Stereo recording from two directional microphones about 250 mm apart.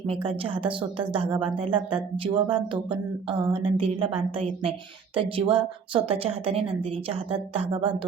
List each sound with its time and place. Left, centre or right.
0.1 s a woman's voice: right